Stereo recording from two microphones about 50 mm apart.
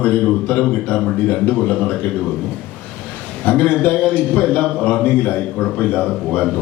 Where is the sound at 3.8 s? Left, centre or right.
Left.